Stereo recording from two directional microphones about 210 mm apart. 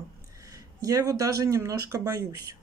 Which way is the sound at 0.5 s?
15° right (ahead or behind).